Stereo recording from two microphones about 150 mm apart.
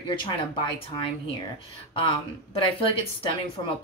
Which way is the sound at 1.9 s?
35° left (ahead or behind).